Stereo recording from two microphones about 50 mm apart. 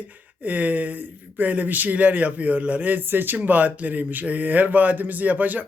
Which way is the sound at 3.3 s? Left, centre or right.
Right.